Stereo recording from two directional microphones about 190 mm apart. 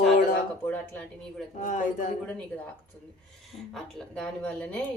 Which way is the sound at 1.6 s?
40° left (ahead or behind).